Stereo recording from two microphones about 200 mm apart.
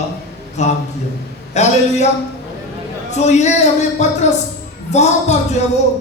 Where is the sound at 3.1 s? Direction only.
35° left (ahead or behind).